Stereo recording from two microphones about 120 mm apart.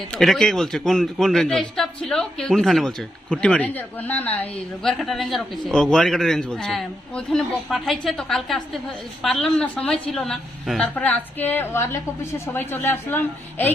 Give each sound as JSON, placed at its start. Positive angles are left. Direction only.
{"t": 0.1, "sound": "a man's voice", "side_deg": 5}
{"t": 4.8, "sound": "a man's voice", "side_deg": 0}